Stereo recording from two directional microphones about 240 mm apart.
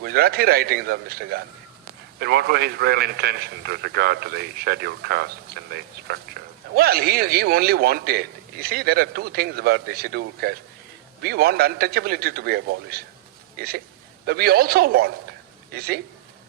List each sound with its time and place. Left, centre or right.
0.0 s a man's voice: right